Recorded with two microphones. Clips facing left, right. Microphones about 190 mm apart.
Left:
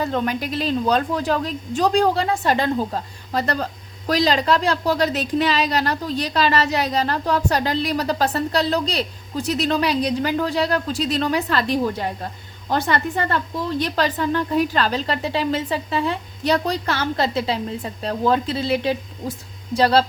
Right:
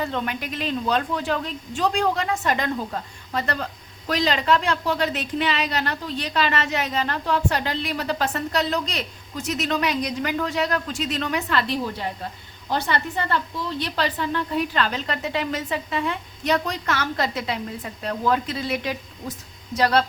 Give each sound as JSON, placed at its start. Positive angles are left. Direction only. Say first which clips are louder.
{"t": 0.0, "sound": "a woman's voice", "louder": "left 5 dB", "side_deg": 40}